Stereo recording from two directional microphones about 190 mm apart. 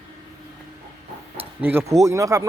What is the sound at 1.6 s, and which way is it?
Speech, 10° right (ahead or behind).